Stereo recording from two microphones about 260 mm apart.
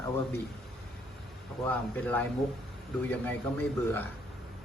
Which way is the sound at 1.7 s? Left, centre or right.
Centre.